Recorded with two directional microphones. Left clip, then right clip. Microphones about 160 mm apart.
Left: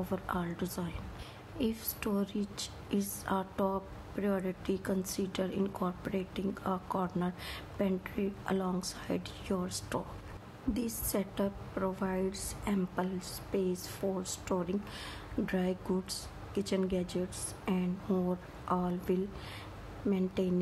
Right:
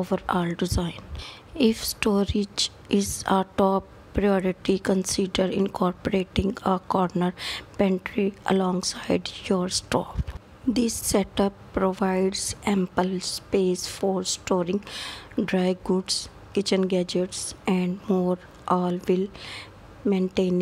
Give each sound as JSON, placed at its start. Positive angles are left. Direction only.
{"t": 0.0, "sound": "a woman's voice", "side_deg": -45}